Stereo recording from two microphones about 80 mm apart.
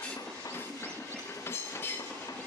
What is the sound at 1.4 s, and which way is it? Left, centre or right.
Train, left.